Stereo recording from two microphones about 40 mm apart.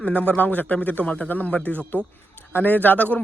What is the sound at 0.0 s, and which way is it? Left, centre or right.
A man's voice, left.